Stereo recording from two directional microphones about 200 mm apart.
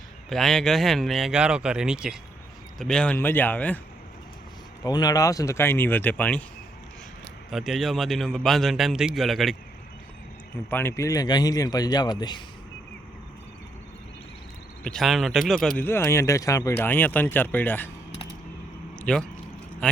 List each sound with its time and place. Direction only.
0.3 s a man's voice: centre (ahead or behind)
4.8 s speech: 20° left (ahead or behind)
7.5 s a man's voice: centre (ahead or behind)
10.7 s a man's voice: 10° left (ahead or behind)
14.8 s a man's voice: centre (ahead or behind)
15.8 s speech: 10° left (ahead or behind)
18.9 s a sound: 5° left (ahead or behind)
19.8 s a man's voice: 5° left (ahead or behind)